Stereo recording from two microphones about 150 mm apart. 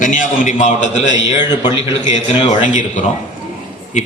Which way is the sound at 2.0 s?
50° left (ahead or behind).